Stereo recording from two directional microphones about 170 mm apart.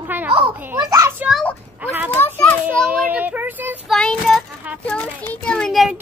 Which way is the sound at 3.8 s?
5° left (ahead or behind).